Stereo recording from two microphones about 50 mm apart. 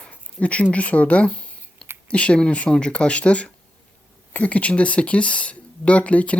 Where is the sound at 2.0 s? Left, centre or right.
Left.